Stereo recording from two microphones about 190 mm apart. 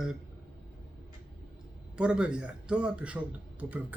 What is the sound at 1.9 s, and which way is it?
Speech, 5° right (ahead or behind).